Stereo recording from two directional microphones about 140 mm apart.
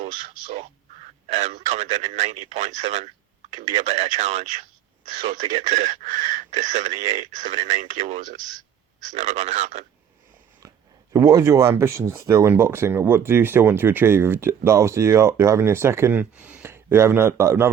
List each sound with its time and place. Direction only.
1.3 s speech: 55° right (ahead or behind)
11.1 s speech: 20° right (ahead or behind)